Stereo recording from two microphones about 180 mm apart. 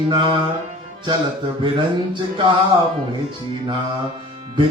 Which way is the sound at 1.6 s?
25° right (ahead or behind).